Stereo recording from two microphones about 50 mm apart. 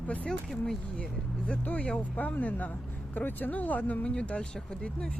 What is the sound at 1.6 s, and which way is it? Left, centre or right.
Speech, left.